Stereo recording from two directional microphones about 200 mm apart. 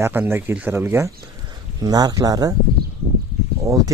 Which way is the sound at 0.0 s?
10° right (ahead or behind).